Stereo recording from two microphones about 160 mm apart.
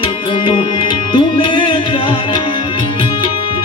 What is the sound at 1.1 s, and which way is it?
Music, 30° left (ahead or behind).